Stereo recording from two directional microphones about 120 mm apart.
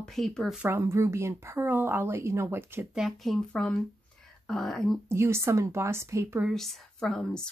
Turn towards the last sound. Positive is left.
turn(degrees=5)  # may be behind; listen again after turning